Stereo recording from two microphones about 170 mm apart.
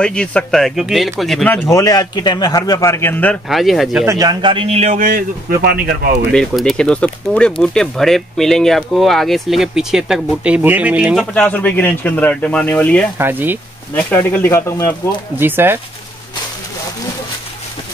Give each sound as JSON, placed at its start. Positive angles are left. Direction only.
{"t": 0.0, "sound": "speech", "side_deg": 5}
{"t": 3.4, "sound": "speech", "side_deg": 0}
{"t": 4.0, "sound": "a man's voice", "side_deg": -20}
{"t": 6.3, "sound": "speech", "side_deg": 0}
{"t": 11.3, "sound": "speech", "side_deg": 10}
{"t": 13.2, "sound": "speech", "side_deg": -10}
{"t": 13.9, "sound": "speech", "side_deg": 10}
{"t": 15.3, "sound": "speech", "side_deg": -10}